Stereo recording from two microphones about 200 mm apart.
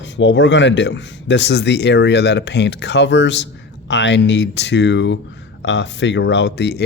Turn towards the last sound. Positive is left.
turn(degrees=55)  # may be behind; listen again after turning